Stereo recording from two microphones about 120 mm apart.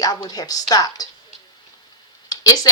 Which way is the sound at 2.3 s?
30° left (ahead or behind).